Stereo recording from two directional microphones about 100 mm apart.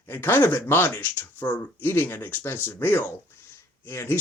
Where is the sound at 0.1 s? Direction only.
20° left (ahead or behind).